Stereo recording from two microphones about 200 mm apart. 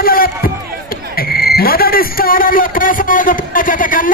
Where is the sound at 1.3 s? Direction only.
50° left (ahead or behind).